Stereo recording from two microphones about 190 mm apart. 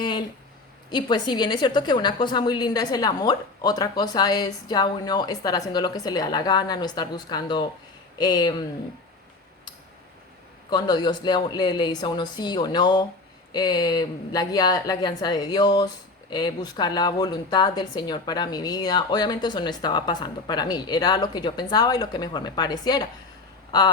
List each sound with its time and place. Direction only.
0.0 s a sound: 25° left (ahead or behind)
0.9 s a woman's voice: 25° left (ahead or behind)
10.7 s a woman's voice: 20° left (ahead or behind)